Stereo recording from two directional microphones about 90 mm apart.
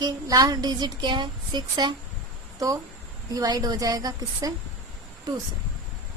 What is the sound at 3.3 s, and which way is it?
Speech, 40° right (ahead or behind).